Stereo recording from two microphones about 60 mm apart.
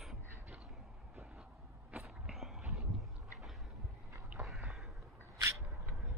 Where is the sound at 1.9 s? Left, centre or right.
Centre.